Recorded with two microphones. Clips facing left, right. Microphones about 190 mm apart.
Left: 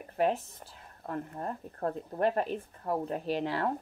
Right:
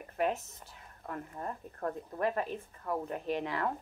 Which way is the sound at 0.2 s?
30° left (ahead or behind).